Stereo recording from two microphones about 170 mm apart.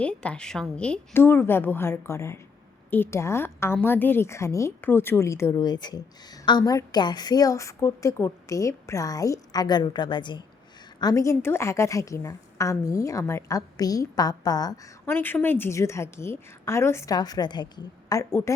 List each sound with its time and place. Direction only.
0.0 s a woman's voice: 5° left (ahead or behind)